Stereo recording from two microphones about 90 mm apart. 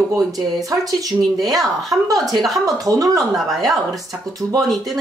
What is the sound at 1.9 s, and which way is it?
Speech, 45° right (ahead or behind).